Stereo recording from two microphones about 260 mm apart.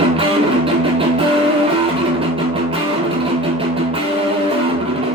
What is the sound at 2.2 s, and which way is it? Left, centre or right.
Music, right.